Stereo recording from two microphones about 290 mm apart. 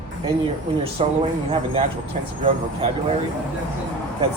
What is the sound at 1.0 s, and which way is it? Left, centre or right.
Speech, right.